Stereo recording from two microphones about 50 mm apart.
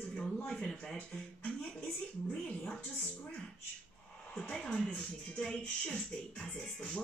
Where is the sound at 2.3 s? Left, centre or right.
Centre.